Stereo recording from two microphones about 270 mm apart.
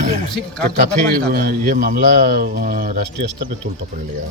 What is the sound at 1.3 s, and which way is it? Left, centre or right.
Speech, right.